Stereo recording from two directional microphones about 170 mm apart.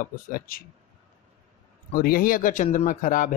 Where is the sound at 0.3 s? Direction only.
60° left (ahead or behind).